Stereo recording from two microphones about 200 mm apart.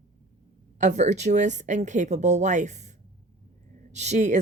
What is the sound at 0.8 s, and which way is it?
Speech, 35° right (ahead or behind).